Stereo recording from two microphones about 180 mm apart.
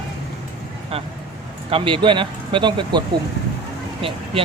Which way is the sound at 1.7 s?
30° right (ahead or behind).